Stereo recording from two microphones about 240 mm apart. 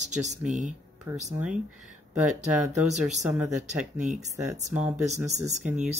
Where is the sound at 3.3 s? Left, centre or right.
Centre.